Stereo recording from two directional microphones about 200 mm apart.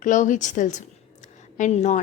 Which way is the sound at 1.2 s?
35° left (ahead or behind).